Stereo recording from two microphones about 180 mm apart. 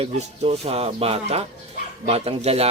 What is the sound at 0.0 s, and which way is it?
Speech, 35° right (ahead or behind).